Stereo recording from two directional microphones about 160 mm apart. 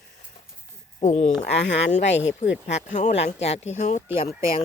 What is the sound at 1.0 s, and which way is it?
Speech, 45° left (ahead or behind).